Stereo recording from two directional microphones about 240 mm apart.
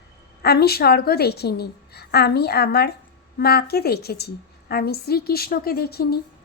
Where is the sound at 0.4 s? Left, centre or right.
Left.